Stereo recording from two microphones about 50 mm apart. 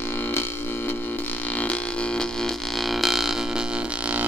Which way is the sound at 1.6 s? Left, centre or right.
Left.